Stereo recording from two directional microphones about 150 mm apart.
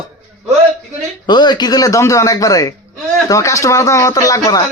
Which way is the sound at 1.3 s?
30° left (ahead or behind).